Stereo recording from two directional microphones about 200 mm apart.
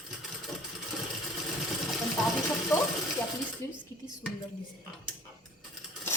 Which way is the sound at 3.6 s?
10° left (ahead or behind).